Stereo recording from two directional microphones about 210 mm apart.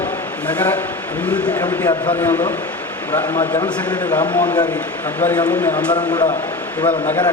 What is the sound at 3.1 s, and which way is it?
A man's voice, 20° left (ahead or behind).